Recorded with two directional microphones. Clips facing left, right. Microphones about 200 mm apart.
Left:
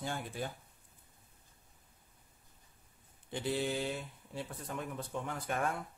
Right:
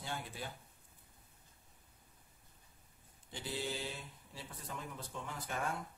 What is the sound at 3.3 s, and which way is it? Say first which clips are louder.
Speech: left 7 dB; 55° left (ahead or behind).